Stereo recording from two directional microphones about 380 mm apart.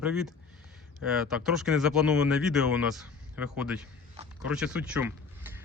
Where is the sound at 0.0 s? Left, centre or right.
Centre.